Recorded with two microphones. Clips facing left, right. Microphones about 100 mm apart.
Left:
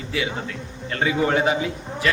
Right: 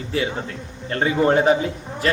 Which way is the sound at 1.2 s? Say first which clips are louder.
Right 5 dB; 35° right (ahead or behind).